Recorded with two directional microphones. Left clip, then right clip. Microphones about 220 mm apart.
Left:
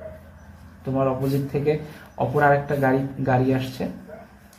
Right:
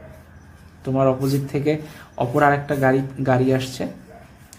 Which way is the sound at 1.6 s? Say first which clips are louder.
Right 1 dB; 35° right (ahead or behind).